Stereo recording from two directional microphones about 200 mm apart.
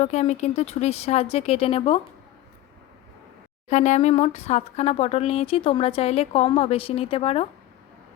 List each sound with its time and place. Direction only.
0.0 s speech: 35° left (ahead or behind)
3.7 s speech: 35° left (ahead or behind)